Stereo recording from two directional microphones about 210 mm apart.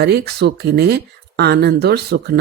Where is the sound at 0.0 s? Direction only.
50° right (ahead or behind).